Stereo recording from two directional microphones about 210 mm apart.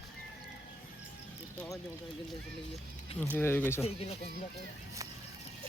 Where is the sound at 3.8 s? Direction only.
30° left (ahead or behind).